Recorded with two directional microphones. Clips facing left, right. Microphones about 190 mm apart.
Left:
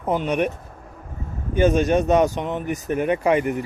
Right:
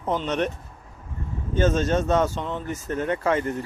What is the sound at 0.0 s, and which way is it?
Speech, 10° left (ahead or behind).